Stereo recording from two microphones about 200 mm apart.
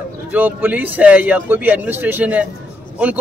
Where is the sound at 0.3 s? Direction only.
10° right (ahead or behind).